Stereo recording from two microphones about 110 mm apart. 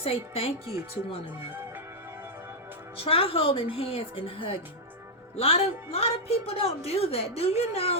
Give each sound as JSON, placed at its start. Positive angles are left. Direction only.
{"t": 0.0, "sound": "a woman's voice", "side_deg": 60}
{"t": 3.0, "sound": "a woman's voice", "side_deg": 55}